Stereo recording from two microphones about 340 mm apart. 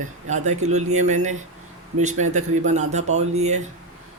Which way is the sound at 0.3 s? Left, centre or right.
Centre.